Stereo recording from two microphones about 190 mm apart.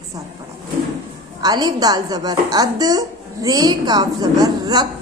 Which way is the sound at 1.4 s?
20° right (ahead or behind).